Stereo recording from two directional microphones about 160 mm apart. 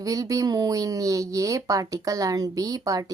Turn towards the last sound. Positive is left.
turn(degrees=-20)  # may be behind; listen again after turning